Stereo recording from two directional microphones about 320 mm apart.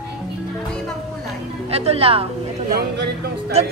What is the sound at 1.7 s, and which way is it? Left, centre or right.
Speech, centre.